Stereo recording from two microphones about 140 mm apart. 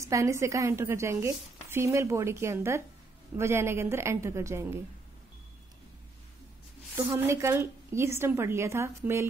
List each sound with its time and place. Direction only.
0.0 s a woman's voice: 20° right (ahead or behind)
7.1 s a woman's voice: 20° right (ahead or behind)